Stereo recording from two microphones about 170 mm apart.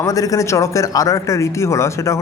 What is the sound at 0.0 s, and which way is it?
A man's voice, 20° left (ahead or behind).